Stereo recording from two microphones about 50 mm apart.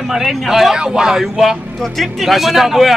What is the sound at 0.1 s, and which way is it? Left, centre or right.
Speech, centre.